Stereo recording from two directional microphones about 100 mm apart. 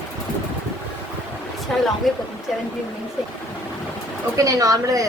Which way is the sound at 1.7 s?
5° left (ahead or behind).